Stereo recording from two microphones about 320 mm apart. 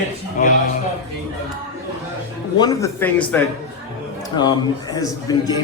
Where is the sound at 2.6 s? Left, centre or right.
Centre.